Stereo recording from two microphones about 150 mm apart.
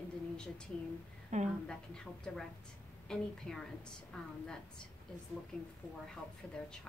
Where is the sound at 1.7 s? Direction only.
5° left (ahead or behind).